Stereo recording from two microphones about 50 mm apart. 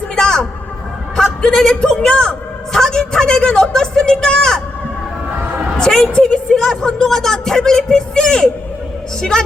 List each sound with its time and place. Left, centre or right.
0.2 s a sound: centre
1.5 s speech: centre
5.8 s speech: centre